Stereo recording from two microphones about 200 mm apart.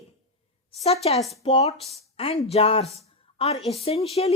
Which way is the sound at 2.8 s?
Centre (ahead or behind).